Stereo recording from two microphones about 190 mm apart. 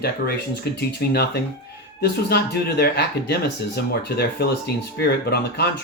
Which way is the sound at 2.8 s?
55° left (ahead or behind).